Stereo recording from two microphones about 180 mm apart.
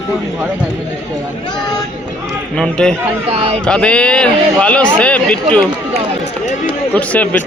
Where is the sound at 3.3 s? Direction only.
35° right (ahead or behind).